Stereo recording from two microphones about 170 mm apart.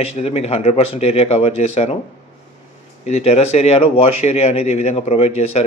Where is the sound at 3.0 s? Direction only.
40° left (ahead or behind).